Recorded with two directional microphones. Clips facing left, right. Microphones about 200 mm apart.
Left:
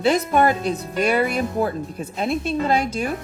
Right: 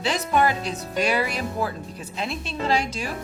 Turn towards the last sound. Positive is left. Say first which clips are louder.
# left 4 dB
turn(degrees=55)  # may be behind; listen again after turning